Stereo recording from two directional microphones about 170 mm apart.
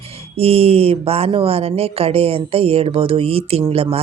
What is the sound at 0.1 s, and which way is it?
Speech, 35° right (ahead or behind).